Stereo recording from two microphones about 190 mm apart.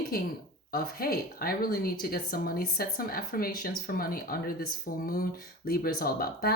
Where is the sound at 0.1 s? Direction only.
50° left (ahead or behind).